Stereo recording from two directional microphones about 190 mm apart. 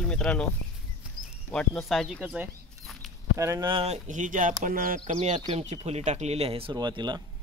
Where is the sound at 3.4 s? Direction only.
20° right (ahead or behind).